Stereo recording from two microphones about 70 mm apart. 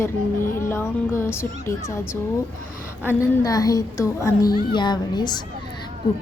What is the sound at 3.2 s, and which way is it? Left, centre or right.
A woman's voice, left.